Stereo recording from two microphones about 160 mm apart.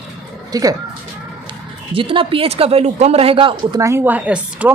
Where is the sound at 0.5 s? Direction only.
25° right (ahead or behind).